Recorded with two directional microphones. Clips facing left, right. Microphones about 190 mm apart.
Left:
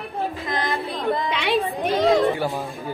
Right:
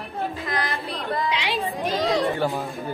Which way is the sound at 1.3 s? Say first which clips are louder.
Left 4 dB; 55° left (ahead or behind).